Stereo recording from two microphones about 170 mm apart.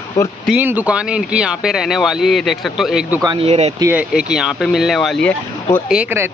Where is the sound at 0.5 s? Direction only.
10° right (ahead or behind).